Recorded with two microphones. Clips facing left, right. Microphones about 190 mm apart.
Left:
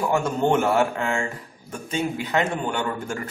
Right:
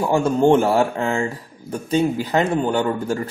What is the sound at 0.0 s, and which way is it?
Speech, 30° right (ahead or behind).